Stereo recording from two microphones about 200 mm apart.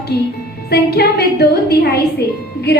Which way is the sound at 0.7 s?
55° left (ahead or behind).